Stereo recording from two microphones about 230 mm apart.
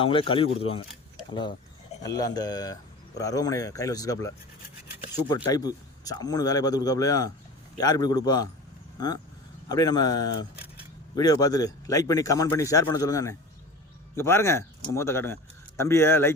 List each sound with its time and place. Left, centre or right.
0.0 s speech: left